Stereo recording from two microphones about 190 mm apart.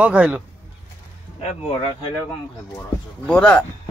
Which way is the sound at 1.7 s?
30° left (ahead or behind).